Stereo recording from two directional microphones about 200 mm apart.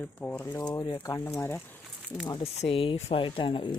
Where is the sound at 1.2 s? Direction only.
10° left (ahead or behind).